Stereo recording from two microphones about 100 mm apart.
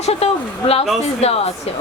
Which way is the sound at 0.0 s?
90° left.